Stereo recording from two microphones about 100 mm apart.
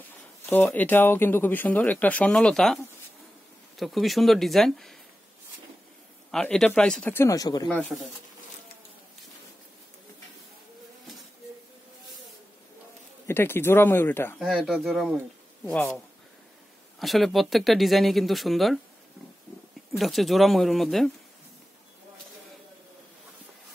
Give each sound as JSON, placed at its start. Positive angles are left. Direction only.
{"t": 0.5, "sound": "speech", "side_deg": 20}
{"t": 6.3, "sound": "speech", "side_deg": 5}
{"t": 7.2, "sound": "speech", "side_deg": 35}
{"t": 7.9, "sound": "speech", "side_deg": 0}
{"t": 13.3, "sound": "speech", "side_deg": 20}
{"t": 14.4, "sound": "speech", "side_deg": -5}
{"t": 17.0, "sound": "speech", "side_deg": 0}
{"t": 20.0, "sound": "speech", "side_deg": 0}